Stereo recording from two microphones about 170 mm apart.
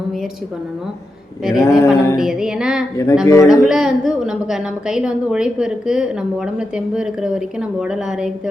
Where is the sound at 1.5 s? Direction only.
20° left (ahead or behind).